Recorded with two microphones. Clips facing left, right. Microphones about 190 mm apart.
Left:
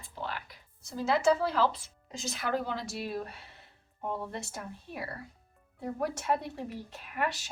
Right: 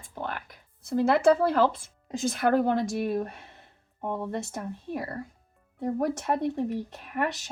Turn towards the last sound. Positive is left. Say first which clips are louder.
# right 5 dB
turn(degrees=-50)  # may be behind; listen again after turning